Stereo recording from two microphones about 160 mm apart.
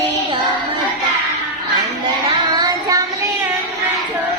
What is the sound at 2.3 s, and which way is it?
Child singing, 25° right (ahead or behind).